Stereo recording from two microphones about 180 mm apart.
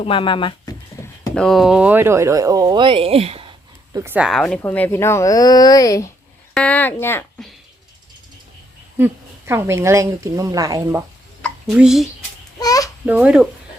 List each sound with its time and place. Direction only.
0.0 s speech: 30° left (ahead or behind)
1.0 s speech: 5° left (ahead or behind); by 3.5 s 30° right (ahead or behind)
3.9 s speech: 10° right (ahead or behind); by 6.1 s 20° left (ahead or behind)
6.5 s speech: 5° left (ahead or behind)
9.5 s speech: 15° right (ahead or behind)
11.7 s speech: 5° right (ahead or behind)
12.5 s a sound: 20° left (ahead or behind)
13.1 s speech: 5° right (ahead or behind)